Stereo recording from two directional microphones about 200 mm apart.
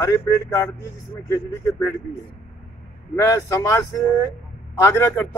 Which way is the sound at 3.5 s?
15° left (ahead or behind).